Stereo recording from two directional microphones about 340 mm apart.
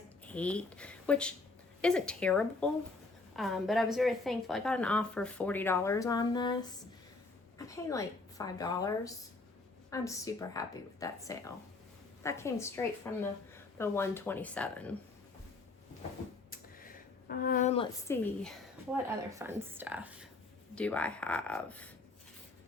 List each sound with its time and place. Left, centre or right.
0.3 s a woman's voice: centre
16.5 s a woman's voice: left; by 18.6 s centre
19.3 s a woman's voice: centre